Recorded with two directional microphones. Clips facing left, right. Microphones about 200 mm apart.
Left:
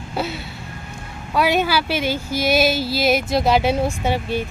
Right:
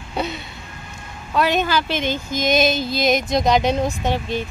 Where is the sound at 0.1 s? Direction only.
5° left (ahead or behind).